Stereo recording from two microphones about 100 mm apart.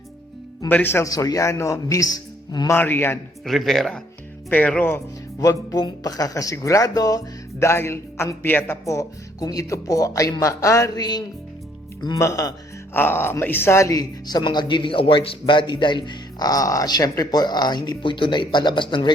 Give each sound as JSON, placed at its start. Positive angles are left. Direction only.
{"t": 0.7, "sound": "a man's voice", "side_deg": 20}
{"t": 1.0, "sound": "speech", "side_deg": 35}
{"t": 2.7, "sound": "a man's voice", "side_deg": 20}
{"t": 3.4, "sound": "speech", "side_deg": 0}
{"t": 4.4, "sound": "speech", "side_deg": 15}
{"t": 5.4, "sound": "speech", "side_deg": 40}
{"t": 8.8, "sound": "speech", "side_deg": 35}
{"t": 12.9, "sound": "speech", "side_deg": 20}